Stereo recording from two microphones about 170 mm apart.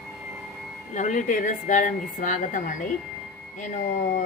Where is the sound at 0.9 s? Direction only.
45° left (ahead or behind).